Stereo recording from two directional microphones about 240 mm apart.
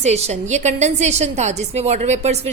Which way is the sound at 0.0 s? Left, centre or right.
Right.